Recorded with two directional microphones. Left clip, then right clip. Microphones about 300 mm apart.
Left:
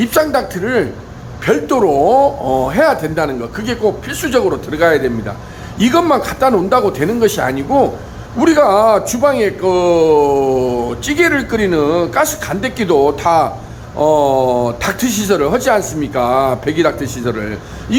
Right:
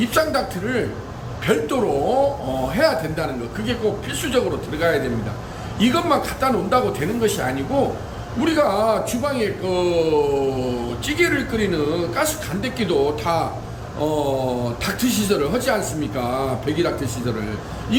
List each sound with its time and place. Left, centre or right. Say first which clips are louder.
0.0 s speech: left 6 dB; centre